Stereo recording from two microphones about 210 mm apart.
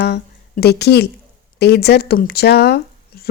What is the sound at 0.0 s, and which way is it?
Speech, 45° left (ahead or behind).